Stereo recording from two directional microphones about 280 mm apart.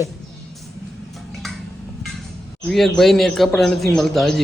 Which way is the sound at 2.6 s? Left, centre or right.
Centre.